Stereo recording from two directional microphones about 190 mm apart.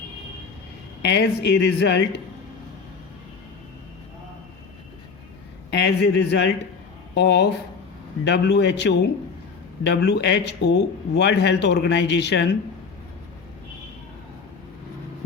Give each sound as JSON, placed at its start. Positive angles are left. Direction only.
{"t": 1.0, "sound": "a man's voice", "side_deg": 60}
{"t": 5.8, "sound": "a man's voice", "side_deg": 65}